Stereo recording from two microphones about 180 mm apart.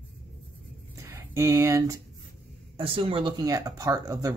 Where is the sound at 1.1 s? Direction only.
15° right (ahead or behind).